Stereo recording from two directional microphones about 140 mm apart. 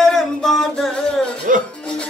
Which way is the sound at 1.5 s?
70° right (ahead or behind).